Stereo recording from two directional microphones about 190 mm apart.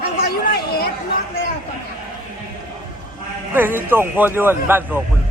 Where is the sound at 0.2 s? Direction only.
55° left (ahead or behind).